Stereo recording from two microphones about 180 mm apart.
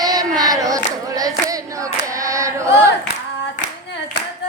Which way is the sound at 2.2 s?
15° right (ahead or behind).